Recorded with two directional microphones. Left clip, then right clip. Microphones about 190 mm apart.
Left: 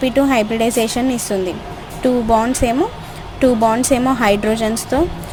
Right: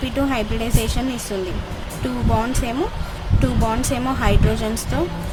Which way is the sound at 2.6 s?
25° left (ahead or behind).